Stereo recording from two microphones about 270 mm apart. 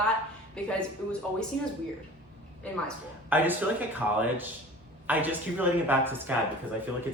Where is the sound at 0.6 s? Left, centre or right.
Centre.